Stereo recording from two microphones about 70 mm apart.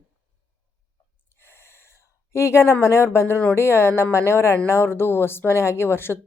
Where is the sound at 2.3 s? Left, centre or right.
Left.